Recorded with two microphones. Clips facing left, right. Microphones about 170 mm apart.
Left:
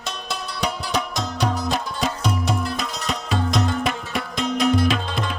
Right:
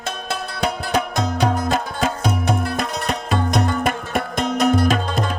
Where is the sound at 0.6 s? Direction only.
55° right (ahead or behind).